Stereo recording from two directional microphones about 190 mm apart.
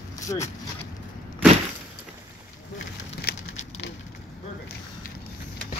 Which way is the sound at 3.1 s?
70° left (ahead or behind).